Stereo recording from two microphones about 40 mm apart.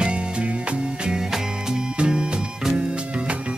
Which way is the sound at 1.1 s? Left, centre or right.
Centre.